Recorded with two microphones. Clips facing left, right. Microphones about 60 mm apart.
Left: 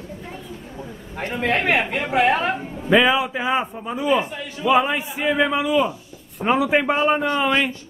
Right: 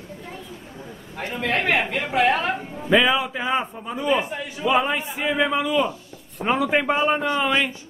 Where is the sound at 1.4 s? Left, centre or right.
Centre.